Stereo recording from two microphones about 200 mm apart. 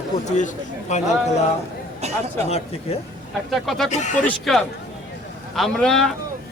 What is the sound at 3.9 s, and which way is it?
Speech, 35° left (ahead or behind).